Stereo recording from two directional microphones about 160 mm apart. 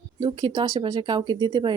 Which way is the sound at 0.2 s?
30° right (ahead or behind).